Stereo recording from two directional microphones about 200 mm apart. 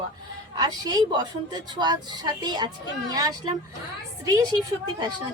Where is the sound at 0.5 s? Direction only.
20° right (ahead or behind).